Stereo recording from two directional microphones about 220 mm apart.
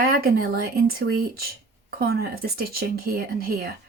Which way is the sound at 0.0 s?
45° right (ahead or behind).